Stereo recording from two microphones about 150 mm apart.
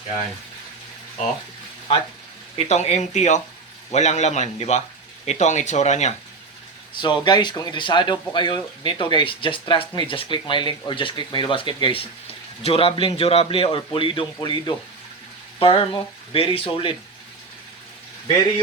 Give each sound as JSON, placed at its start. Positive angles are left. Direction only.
{"t": 2.6, "sound": "speech", "side_deg": 45}
{"t": 7.0, "sound": "speech", "side_deg": 30}